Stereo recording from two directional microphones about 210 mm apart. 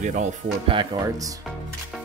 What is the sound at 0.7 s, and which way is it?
Speech, 20° right (ahead or behind).